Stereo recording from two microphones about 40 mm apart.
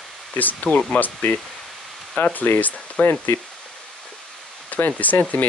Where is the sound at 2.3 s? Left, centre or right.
Left.